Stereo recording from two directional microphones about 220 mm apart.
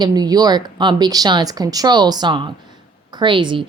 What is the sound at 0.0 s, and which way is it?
A woman's voice, 15° right (ahead or behind).